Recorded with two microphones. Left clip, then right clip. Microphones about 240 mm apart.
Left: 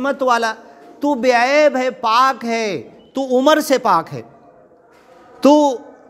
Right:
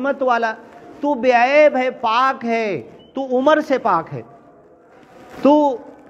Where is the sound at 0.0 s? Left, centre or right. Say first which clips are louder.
Left 1 dB; left.